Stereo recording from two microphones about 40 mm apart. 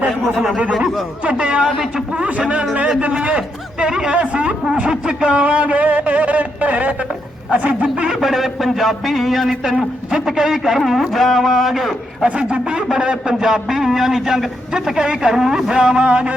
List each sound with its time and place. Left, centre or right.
0.1 s a sound: centre
1.2 s a man's voice: right
3.0 s a sound: right
8.2 s speech: centre
10.1 s a man's voice: centre
12.3 s speech: right
13.1 s a man's voice: centre
15.3 s a man's voice: centre
16.0 s speech: right